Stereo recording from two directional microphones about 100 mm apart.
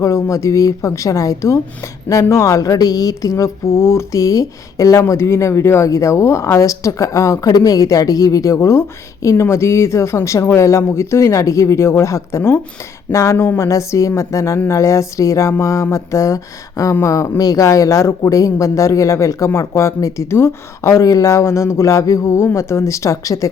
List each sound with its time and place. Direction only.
0.0 s speech: 30° left (ahead or behind)